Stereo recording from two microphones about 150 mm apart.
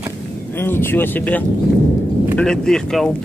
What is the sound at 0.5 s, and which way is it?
Speech, 15° left (ahead or behind).